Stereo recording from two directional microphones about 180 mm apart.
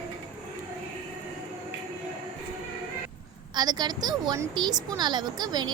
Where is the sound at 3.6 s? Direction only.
25° right (ahead or behind).